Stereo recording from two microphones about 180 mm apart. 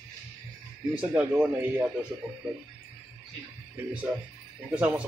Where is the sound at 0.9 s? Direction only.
10° right (ahead or behind).